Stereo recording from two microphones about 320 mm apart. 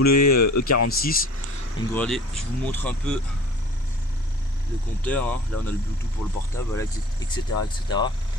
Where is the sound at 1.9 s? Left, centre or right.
Centre.